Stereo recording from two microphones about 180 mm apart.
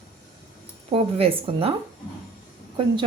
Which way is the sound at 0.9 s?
30° right (ahead or behind).